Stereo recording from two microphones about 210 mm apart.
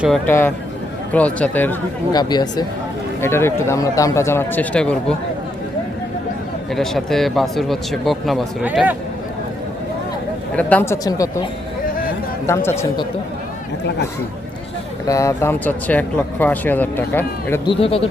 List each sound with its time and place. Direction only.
0.3 s speech: 10° left (ahead or behind)
2.1 s speech: 20° left (ahead or behind)
6.7 s speech: centre (ahead or behind)
10.5 s speech: 5° left (ahead or behind)
12.5 s speech: 15° left (ahead or behind)
15.0 s speech: 15° left (ahead or behind)
17.7 s speech: 25° left (ahead or behind)